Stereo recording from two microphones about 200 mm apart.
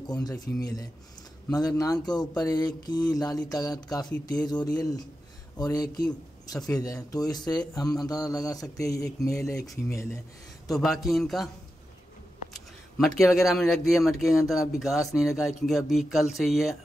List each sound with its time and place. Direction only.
0.0 s speech: 20° left (ahead or behind)
6.7 s a sound: 15° left (ahead or behind)
10.7 s speech: centre (ahead or behind)
12.9 s speech: centre (ahead or behind)